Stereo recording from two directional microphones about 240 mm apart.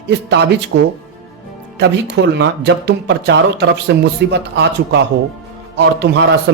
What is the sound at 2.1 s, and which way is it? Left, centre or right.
Speech, right.